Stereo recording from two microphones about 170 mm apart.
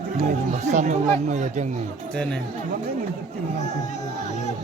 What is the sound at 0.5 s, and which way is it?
Speech, 45° right (ahead or behind).